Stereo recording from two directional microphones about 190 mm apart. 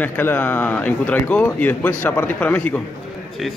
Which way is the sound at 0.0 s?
10° left (ahead or behind).